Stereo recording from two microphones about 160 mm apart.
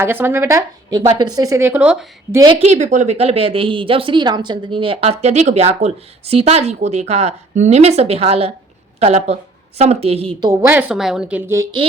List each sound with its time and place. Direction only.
0.0 s speech: 15° right (ahead or behind)
2.5 s a woman's voice: 40° right (ahead or behind)
10.4 s speech: 20° right (ahead or behind)